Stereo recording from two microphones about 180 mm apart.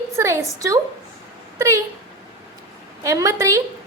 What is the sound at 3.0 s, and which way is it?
Speech, 20° right (ahead or behind).